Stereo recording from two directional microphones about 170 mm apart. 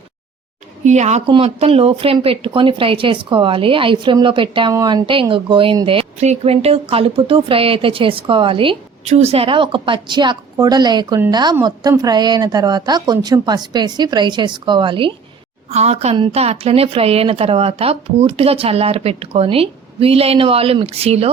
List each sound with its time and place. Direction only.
0.9 s a woman's voice: 40° right (ahead or behind)
15.7 s speech: 40° right (ahead or behind)